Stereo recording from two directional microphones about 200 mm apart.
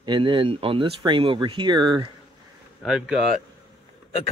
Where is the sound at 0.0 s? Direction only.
25° right (ahead or behind).